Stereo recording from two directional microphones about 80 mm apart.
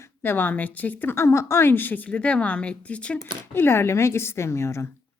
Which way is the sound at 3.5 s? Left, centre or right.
Left.